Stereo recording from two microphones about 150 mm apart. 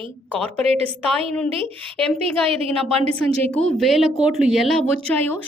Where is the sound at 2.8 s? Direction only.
40° right (ahead or behind).